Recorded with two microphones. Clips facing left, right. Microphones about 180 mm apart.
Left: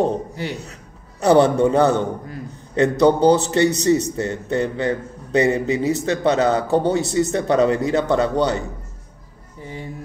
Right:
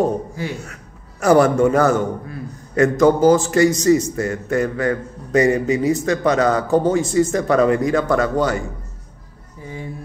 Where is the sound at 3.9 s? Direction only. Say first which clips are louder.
Right 2 dB; 35° left (ahead or behind).